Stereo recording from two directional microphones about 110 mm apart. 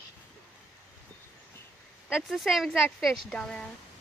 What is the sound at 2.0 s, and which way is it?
Speech, 5° right (ahead or behind).